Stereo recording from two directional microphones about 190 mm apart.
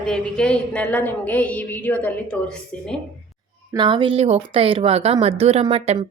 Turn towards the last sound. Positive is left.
turn(degrees=-30)  # may be behind; listen again after turning